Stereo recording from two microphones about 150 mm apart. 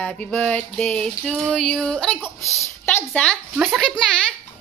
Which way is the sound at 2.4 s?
20° left (ahead or behind).